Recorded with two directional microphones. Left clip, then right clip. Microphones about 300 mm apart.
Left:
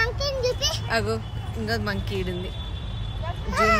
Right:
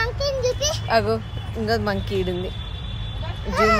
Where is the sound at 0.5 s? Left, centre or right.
Centre.